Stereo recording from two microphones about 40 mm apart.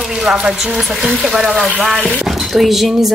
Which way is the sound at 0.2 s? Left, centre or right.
Centre.